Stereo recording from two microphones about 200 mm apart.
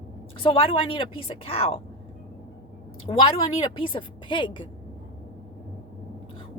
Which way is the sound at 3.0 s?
25° left (ahead or behind).